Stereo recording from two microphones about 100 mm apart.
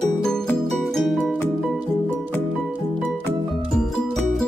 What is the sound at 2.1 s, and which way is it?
Music, 20° left (ahead or behind).